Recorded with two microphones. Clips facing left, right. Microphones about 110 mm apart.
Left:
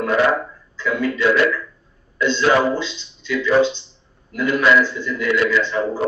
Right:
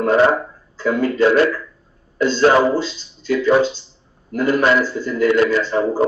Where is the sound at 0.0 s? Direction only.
35° right (ahead or behind).